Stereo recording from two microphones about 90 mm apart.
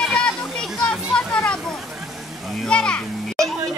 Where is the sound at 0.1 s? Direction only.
10° left (ahead or behind).